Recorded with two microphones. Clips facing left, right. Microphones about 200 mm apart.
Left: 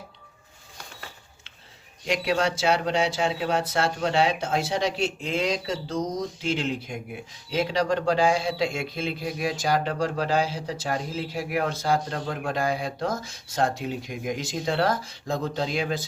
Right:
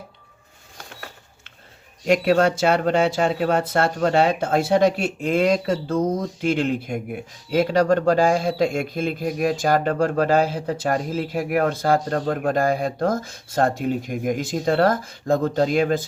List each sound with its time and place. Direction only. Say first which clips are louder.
2.0 s speech: right 7 dB; 50° right (ahead or behind)